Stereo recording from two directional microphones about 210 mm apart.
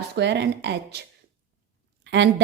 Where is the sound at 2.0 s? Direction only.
55° right (ahead or behind).